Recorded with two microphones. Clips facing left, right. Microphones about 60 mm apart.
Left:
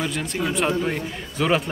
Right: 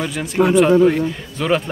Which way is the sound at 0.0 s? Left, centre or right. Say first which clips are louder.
Right 2 dB; centre.